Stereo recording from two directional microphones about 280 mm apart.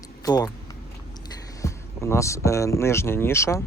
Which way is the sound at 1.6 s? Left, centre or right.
Centre.